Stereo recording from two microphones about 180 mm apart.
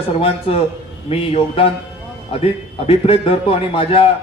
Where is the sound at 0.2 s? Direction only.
30° left (ahead or behind).